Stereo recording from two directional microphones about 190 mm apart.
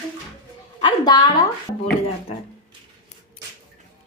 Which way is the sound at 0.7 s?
25° left (ahead or behind).